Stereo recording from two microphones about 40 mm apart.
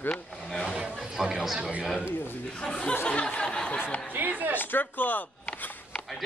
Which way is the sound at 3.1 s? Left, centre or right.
Left.